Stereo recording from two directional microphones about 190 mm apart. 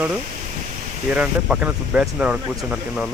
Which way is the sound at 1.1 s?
10° right (ahead or behind).